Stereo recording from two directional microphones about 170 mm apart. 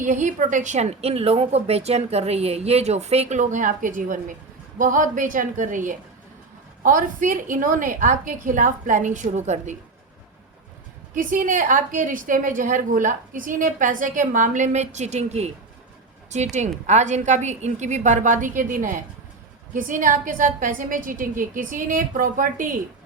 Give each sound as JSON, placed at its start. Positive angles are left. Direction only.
{"t": 0.0, "sound": "a woman's voice", "side_deg": -45}
{"t": 11.1, "sound": "a woman's voice", "side_deg": -50}